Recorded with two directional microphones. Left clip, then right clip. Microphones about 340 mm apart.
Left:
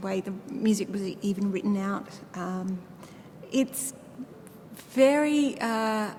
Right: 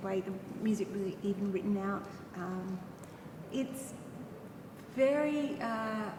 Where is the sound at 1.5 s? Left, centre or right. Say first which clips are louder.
Left 5 dB; left.